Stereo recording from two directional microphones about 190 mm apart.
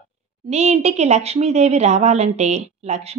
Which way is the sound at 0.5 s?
35° right (ahead or behind).